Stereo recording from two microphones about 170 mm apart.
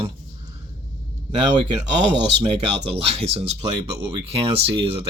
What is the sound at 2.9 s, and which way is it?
Speech, 35° right (ahead or behind).